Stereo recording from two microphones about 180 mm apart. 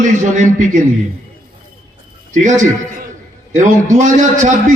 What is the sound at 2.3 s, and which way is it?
A man's voice, 45° right (ahead or behind).